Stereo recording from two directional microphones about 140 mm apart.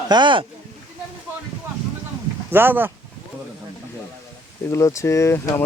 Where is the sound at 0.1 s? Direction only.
35° right (ahead or behind).